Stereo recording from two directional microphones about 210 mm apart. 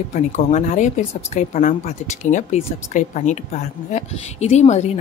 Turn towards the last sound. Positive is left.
turn(degrees=30)  # may be behind; listen again after turning